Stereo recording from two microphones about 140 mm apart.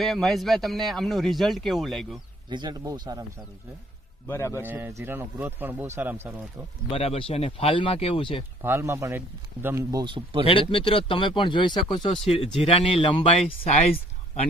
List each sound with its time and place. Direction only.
0.0 s speech: centre (ahead or behind)
2.5 s a man's voice: 30° right (ahead or behind)
4.3 s a man's voice: 20° left (ahead or behind)
4.6 s speech: 15° right (ahead or behind)
6.9 s speech: 45° left (ahead or behind)
8.6 s a man's voice: 20° right (ahead or behind); by 10.4 s 35° right (ahead or behind)
10.4 s speech: 40° left (ahead or behind)